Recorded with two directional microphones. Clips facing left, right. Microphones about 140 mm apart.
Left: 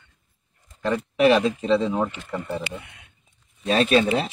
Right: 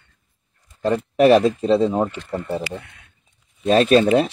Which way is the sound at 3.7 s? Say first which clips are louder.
Right 5 dB; 45° right (ahead or behind).